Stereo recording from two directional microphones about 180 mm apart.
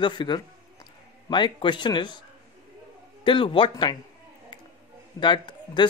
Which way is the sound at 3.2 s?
30° left (ahead or behind).